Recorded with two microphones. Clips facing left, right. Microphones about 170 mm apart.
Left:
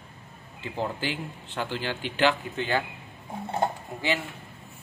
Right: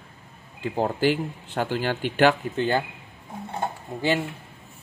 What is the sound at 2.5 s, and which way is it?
Speech, 35° right (ahead or behind).